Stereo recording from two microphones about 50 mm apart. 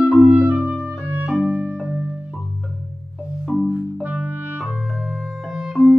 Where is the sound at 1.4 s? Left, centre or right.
Right.